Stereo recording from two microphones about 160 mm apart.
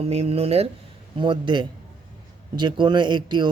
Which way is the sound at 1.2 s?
30° right (ahead or behind).